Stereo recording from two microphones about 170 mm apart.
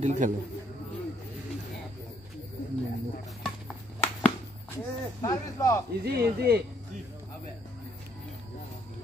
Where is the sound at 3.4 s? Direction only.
5° left (ahead or behind).